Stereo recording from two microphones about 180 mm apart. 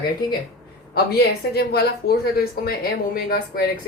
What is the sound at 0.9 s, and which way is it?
Speech, 65° left (ahead or behind).